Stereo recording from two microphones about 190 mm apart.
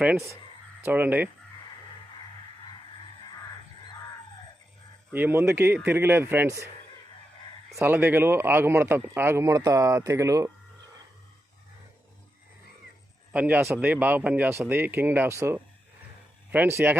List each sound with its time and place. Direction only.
0.0 s speech: 10° right (ahead or behind)
5.1 s speech: 10° right (ahead or behind)
7.8 s speech: 10° right (ahead or behind)
13.3 s speech: 10° right (ahead or behind)